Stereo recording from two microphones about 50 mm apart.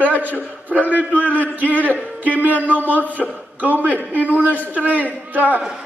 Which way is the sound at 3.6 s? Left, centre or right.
Right.